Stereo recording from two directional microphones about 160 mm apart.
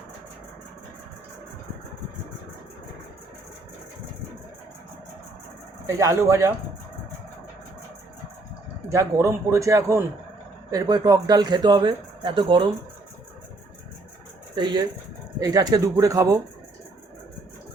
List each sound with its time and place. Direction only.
5.8 s speech: 20° right (ahead or behind)
8.9 s speech: 15° right (ahead or behind)
14.5 s speech: 25° right (ahead or behind)